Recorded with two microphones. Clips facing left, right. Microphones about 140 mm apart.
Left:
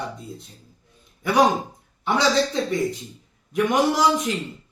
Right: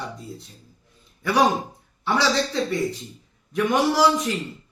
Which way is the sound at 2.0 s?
20° left (ahead or behind).